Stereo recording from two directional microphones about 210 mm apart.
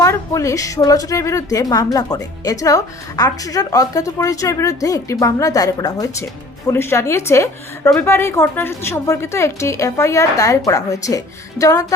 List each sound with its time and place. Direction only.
0.0 s a woman's voice: 15° left (ahead or behind)